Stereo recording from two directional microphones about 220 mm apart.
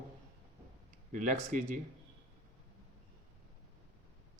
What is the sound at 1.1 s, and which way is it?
Speech, 35° right (ahead or behind).